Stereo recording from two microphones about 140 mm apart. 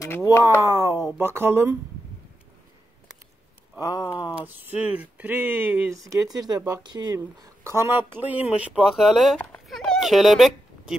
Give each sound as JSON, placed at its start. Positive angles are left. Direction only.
{"t": 0.0, "sound": "speech", "side_deg": 25}
{"t": 0.4, "sound": "speech", "side_deg": -20}
{"t": 3.9, "sound": "speech", "side_deg": 30}
{"t": 4.6, "sound": "speech", "side_deg": -10}